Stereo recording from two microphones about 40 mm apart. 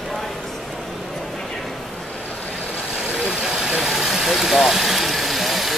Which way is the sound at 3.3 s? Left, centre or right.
Centre.